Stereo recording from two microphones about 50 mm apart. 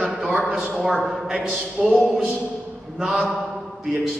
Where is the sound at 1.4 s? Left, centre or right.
Centre.